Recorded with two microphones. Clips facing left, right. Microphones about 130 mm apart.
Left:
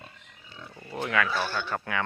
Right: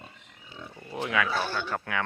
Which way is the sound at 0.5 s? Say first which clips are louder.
Right 2 dB; 15° right (ahead or behind).